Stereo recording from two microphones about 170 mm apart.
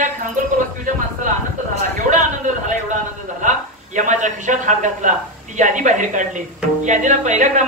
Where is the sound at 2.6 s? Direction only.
45° right (ahead or behind).